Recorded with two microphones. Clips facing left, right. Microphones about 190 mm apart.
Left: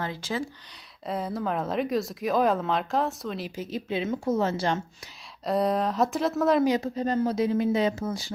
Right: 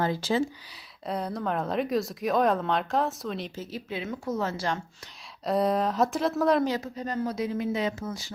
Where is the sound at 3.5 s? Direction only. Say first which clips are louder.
Left 5 dB; 15° left (ahead or behind).